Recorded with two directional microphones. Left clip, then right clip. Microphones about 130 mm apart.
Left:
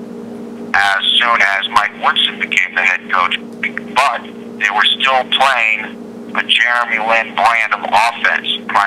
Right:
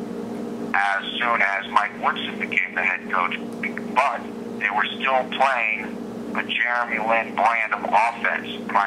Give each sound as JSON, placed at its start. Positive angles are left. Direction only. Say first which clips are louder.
{"t": 0.7, "sound": "speech", "louder": "left 10 dB", "side_deg": 40}